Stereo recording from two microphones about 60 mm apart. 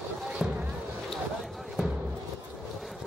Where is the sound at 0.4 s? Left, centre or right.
Centre.